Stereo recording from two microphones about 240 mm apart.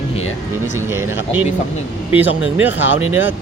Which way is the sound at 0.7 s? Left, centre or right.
Centre.